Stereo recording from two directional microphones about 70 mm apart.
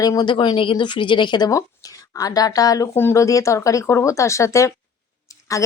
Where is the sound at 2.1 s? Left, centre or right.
Left.